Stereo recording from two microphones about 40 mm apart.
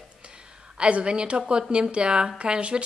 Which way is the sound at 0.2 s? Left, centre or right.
Right.